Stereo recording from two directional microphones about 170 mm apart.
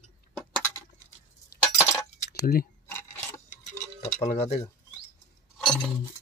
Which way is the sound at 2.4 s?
60° left (ahead or behind).